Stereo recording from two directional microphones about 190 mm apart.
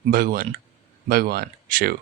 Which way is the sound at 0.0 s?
50° right (ahead or behind).